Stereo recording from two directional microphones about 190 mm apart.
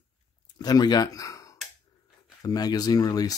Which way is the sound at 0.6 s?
20° left (ahead or behind).